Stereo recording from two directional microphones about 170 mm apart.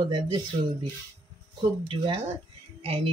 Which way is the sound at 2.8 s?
35° right (ahead or behind).